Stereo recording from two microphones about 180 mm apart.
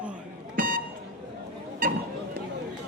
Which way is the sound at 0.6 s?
50° right (ahead or behind).